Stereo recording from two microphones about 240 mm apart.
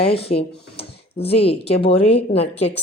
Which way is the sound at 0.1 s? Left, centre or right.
Left.